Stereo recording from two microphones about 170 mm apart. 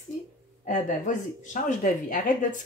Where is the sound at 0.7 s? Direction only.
50° left (ahead or behind).